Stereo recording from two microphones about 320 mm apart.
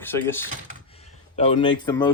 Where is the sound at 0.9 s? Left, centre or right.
Centre.